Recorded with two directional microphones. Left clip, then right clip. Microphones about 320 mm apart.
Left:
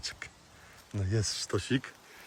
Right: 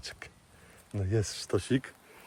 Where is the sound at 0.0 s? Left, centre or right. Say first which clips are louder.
Left 3 dB; centre.